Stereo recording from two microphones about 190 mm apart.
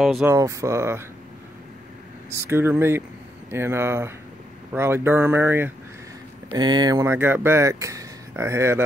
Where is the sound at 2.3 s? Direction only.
15° right (ahead or behind).